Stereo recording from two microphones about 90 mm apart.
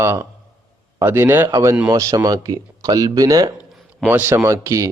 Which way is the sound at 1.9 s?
40° right (ahead or behind).